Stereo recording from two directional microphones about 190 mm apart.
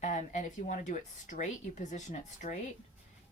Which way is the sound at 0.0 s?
40° left (ahead or behind).